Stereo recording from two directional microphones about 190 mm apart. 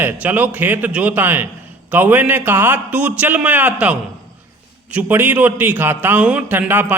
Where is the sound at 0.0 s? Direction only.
10° right (ahead or behind).